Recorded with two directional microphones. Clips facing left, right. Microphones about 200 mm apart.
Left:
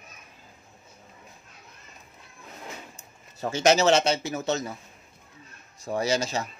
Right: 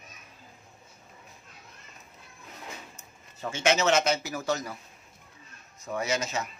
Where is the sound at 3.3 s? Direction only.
40° left (ahead or behind).